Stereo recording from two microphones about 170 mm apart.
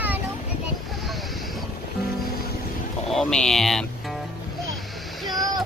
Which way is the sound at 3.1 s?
5° left (ahead or behind).